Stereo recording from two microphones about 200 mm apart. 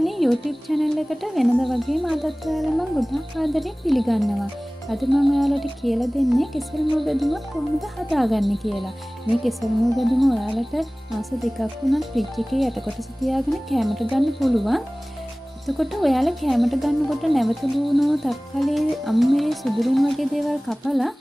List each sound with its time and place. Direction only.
0.0 s speech: centre (ahead or behind)